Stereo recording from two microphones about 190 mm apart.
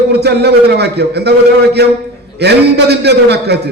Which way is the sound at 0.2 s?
60° right (ahead or behind).